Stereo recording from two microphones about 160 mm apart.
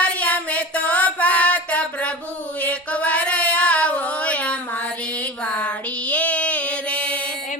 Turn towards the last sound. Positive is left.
turn(degrees=10)  # may be behind; listen again after turning